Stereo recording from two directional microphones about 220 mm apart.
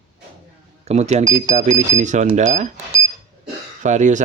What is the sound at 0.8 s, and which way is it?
Speech, 30° right (ahead or behind).